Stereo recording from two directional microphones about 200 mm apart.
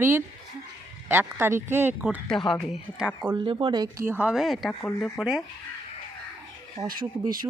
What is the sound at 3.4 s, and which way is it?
Speech, 25° right (ahead or behind).